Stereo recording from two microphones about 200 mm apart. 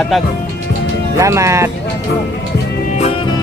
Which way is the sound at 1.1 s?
15° right (ahead or behind).